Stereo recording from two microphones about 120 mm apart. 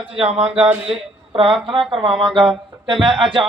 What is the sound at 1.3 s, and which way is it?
Speech, 45° right (ahead or behind).